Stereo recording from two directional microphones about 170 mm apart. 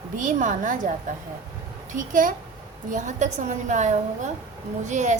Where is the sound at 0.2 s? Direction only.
50° right (ahead or behind).